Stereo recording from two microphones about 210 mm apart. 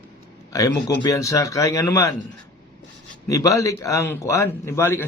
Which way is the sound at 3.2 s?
15° left (ahead or behind).